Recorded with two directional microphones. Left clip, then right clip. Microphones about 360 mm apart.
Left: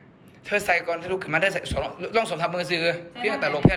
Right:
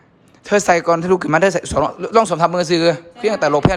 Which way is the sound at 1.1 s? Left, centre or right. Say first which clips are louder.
Right 6 dB; centre.